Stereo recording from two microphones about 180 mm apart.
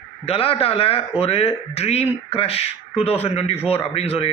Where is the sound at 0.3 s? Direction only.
30° left (ahead or behind).